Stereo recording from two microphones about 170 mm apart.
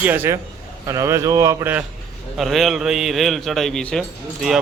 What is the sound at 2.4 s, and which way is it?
Speech, centre (ahead or behind).